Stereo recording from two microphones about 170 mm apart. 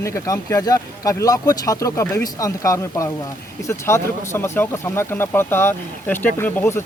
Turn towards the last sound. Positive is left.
turn(degrees=15)  # may be behind; listen again after turning